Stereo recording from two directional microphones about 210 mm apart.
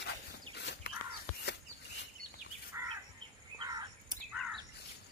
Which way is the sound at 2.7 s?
10° right (ahead or behind).